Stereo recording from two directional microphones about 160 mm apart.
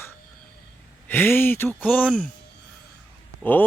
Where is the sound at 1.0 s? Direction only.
10° left (ahead or behind).